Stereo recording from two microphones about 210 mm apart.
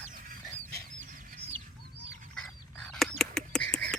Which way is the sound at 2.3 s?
5° left (ahead or behind).